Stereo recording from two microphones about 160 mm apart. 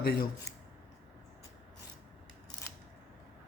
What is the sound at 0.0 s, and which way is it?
Speech, 75° left (ahead or behind).